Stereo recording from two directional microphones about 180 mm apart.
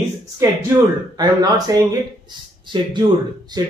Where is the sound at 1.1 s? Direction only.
20° right (ahead or behind).